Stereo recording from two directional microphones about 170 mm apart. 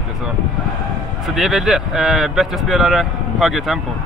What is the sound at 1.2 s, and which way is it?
Speech, centre (ahead or behind).